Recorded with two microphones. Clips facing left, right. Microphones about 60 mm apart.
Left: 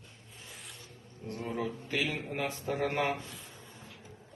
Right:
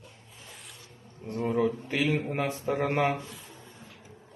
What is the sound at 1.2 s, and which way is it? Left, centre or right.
Speech, right.